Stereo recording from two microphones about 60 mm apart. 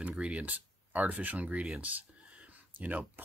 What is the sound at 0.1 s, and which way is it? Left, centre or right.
Speech, centre.